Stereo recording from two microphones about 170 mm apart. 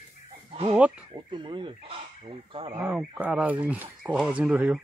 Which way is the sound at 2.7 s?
10° right (ahead or behind).